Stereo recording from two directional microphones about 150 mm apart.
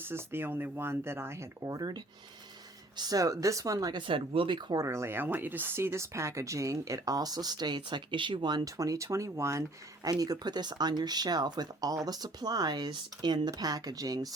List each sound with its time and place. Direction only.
0.0 s speech: 15° right (ahead or behind)
3.0 s speech: 25° right (ahead or behind)